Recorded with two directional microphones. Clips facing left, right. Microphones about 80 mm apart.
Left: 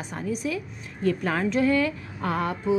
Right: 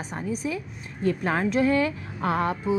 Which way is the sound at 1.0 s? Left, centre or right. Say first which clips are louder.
Even; right.